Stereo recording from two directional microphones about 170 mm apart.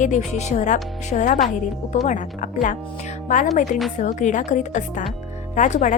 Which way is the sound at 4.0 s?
45° left (ahead or behind).